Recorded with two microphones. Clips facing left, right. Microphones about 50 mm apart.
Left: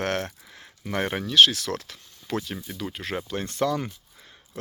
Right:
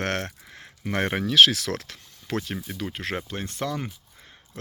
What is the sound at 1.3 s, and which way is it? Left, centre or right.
Speech, right.